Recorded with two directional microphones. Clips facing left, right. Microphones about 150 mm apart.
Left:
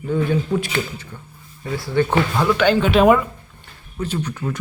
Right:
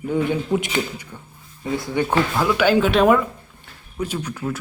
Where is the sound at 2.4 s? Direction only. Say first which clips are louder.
Even; 5° right (ahead or behind).